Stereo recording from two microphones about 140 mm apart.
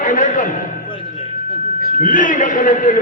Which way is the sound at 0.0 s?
65° left (ahead or behind).